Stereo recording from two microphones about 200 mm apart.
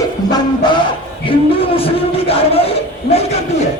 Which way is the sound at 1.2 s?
30° left (ahead or behind).